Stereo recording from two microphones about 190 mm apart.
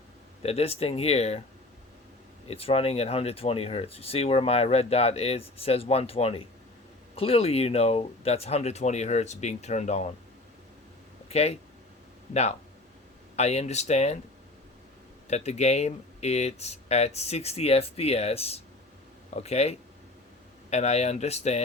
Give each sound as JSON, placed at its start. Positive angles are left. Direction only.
{"t": 0.4, "sound": "speech", "side_deg": 30}
{"t": 2.5, "sound": "speech", "side_deg": 30}
{"t": 11.3, "sound": "speech", "side_deg": 35}
{"t": 15.3, "sound": "speech", "side_deg": 35}